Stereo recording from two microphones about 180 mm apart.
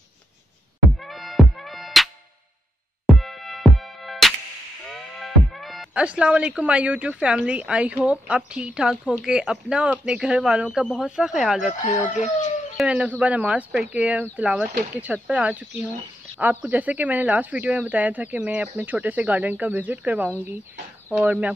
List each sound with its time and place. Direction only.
1.0 s music: centre (ahead or behind)
3.2 s music: centre (ahead or behind)
4.8 s speech: centre (ahead or behind)
11.8 s speech: 40° left (ahead or behind)
12.7 s a man's voice: 5° right (ahead or behind)